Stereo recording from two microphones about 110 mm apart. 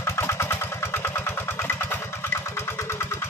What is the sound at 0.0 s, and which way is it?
Vehicle, 25° left (ahead or behind).